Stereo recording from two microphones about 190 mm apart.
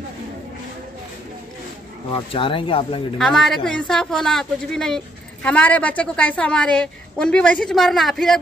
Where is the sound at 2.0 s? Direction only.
25° left (ahead or behind).